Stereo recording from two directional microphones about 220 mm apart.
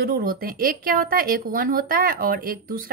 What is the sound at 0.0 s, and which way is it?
Speech, 40° right (ahead or behind).